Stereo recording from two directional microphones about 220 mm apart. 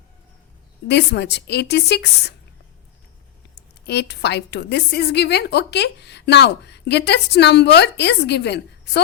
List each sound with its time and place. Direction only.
0.9 s a woman's voice: 50° left (ahead or behind)
3.8 s a woman's voice: 50° left (ahead or behind)